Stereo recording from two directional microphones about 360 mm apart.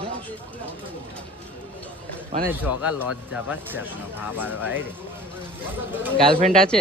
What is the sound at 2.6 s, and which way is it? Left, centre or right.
Speech, centre.